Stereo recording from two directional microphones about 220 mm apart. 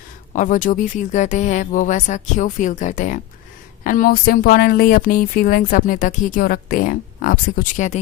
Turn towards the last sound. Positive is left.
turn(degrees=35)  # may be behind; listen again after turning